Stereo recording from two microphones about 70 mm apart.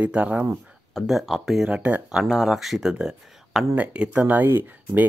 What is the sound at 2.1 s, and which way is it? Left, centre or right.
Speech, centre.